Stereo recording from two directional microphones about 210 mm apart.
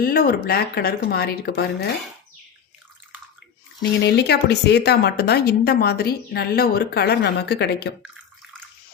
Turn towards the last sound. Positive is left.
turn(degrees=55)  # may be behind; listen again after turning